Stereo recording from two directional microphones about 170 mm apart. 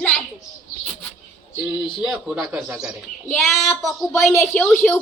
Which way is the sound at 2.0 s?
Centre (ahead or behind).